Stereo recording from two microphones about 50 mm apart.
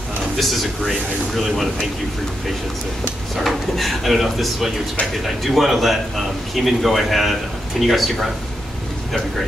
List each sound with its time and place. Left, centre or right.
0.4 s a man's voice: centre
3.3 s a man's voice: centre